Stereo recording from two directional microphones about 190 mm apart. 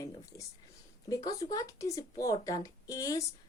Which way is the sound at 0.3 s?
15° left (ahead or behind).